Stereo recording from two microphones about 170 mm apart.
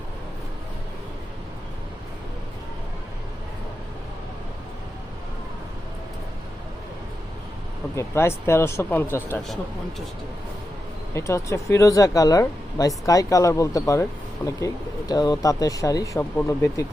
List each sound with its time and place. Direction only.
7.9 s speech: 15° left (ahead or behind)
11.1 s speech: 15° left (ahead or behind)